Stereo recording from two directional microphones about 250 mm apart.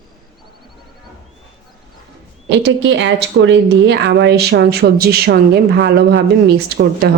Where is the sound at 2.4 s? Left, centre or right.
Right.